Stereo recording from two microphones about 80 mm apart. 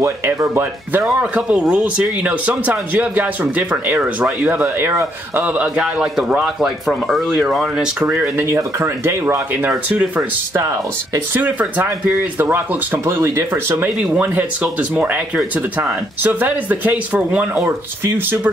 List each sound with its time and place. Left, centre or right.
0.0 s speech: right
1.0 s speech: centre
8.4 s speech: right
9.7 s speech: centre
10.5 s speech: right
11.3 s speech: right
13.0 s speech: right
14.1 s speech: centre
17.6 s speech: right